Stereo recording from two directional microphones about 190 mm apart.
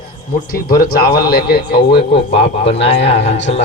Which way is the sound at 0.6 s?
50° left (ahead or behind).